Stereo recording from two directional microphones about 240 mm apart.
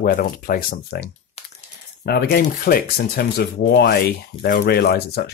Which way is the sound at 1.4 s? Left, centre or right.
Left.